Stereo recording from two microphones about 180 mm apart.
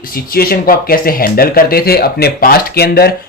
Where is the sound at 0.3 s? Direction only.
55° left (ahead or behind).